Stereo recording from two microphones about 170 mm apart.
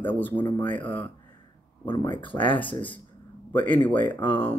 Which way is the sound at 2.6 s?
30° left (ahead or behind).